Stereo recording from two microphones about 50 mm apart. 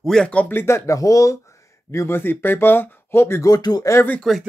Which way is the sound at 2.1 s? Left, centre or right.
Left.